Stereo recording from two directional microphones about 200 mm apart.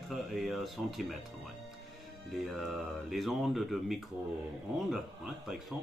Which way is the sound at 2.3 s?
Centre (ahead or behind).